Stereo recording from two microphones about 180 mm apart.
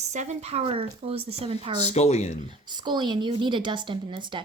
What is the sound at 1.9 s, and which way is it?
Speech, 35° left (ahead or behind).